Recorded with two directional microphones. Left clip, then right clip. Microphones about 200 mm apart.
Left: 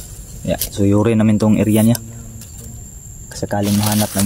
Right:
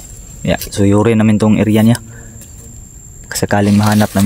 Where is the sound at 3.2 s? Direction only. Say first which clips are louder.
Right 7 dB; 40° right (ahead or behind).